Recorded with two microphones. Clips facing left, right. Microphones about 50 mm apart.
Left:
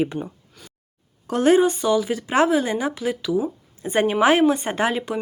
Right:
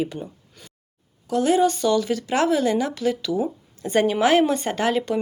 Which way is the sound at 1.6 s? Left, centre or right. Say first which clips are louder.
Left 1 dB; centre.